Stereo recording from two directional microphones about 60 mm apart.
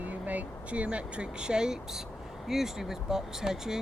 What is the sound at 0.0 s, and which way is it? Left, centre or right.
Speech, right.